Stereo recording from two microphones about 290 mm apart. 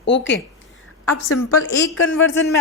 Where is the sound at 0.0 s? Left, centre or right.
Left.